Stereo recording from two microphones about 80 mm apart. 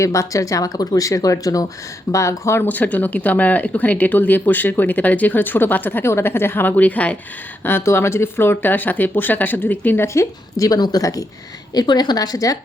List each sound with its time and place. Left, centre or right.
0.0 s speech: left
2.6 s speech: left
7.6 s speech: left
10.8 s a woman's voice: left